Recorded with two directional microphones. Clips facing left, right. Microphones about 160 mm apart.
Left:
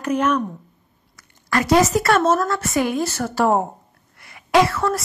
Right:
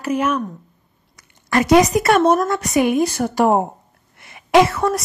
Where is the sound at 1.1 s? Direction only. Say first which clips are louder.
Right 3 dB; 20° right (ahead or behind).